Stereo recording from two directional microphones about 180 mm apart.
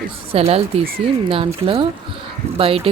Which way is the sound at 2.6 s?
30° right (ahead or behind).